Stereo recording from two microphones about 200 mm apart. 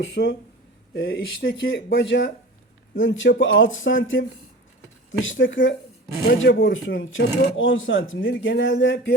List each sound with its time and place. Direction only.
0.0 s a man's voice: 55° left (ahead or behind)